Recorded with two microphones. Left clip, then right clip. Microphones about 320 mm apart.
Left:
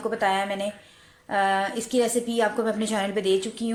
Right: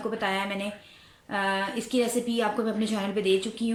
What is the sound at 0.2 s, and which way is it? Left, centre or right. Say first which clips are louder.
A woman's voice: left 6 dB; left.